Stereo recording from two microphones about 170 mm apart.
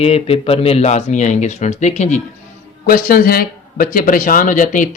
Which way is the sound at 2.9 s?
60° left (ahead or behind).